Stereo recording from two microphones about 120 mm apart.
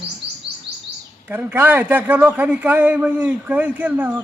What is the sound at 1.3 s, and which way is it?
A man's voice, 15° right (ahead or behind).